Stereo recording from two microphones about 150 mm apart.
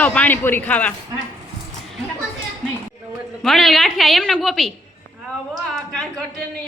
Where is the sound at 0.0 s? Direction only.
10° left (ahead or behind).